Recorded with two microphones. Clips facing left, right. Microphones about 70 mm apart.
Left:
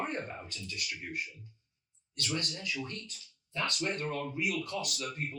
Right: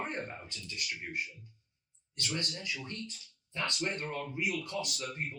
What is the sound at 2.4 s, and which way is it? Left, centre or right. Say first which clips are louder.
Speech: left 2 dB; right.